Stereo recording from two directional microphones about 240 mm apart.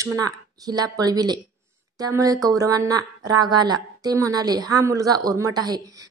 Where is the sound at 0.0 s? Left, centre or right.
Centre.